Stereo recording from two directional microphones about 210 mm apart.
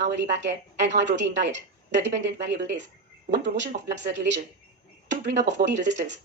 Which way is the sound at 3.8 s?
55° right (ahead or behind).